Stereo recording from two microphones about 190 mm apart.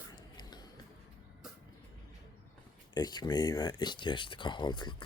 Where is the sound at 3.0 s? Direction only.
20° left (ahead or behind).